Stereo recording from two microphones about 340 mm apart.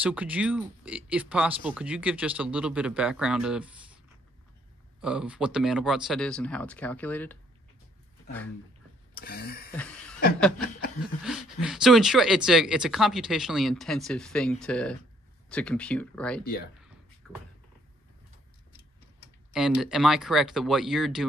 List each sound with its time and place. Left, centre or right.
0.0 s speech: centre
5.0 s speech: centre
9.1 s a sound: left
9.8 s chuckle: centre
11.2 s speech: centre
17.2 s cupboard open or close: centre
19.5 s speech: centre